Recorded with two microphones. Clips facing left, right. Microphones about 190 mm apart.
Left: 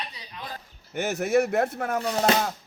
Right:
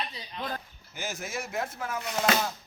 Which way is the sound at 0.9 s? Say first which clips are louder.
Left 13 dB; 65° left (ahead or behind).